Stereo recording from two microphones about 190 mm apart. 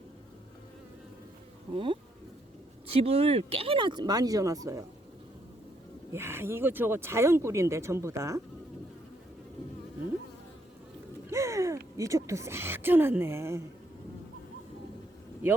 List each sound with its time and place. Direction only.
1.7 s speech: 25° right (ahead or behind)
6.1 s speech: 15° right (ahead or behind)
11.3 s speech: 15° right (ahead or behind)